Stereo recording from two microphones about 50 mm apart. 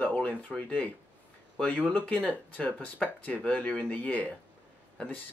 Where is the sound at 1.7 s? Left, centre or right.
Left.